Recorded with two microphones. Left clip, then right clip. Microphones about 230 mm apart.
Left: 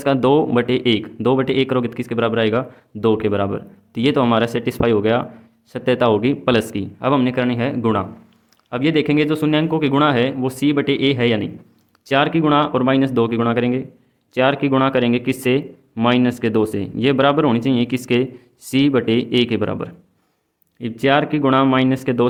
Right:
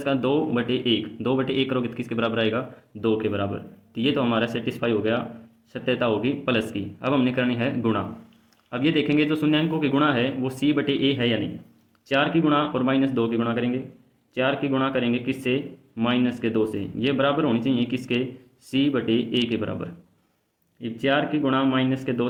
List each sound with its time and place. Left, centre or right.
0.0 s a man's voice: left